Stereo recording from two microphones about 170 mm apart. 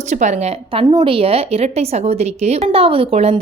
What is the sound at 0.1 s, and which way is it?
A woman's voice, 45° right (ahead or behind).